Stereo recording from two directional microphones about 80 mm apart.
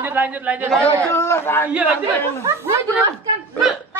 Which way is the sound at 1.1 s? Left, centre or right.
Left.